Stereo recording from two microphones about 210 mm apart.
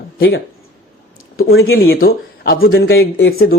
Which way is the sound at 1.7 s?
45° left (ahead or behind).